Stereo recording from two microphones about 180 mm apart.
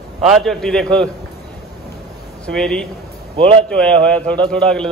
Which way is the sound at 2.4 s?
5° left (ahead or behind).